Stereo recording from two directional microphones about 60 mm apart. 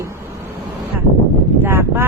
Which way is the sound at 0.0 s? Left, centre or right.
Right.